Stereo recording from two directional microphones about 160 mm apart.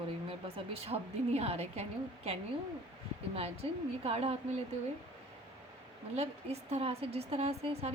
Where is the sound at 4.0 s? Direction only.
40° right (ahead or behind).